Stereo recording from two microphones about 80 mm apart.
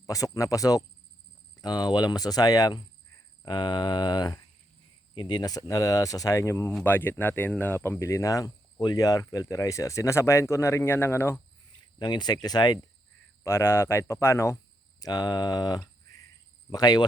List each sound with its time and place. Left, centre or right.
0.1 s speech: left
1.6 s speech: left
3.4 s speech: left
6.8 s speech: left
11.9 s speech: left
13.4 s speech: left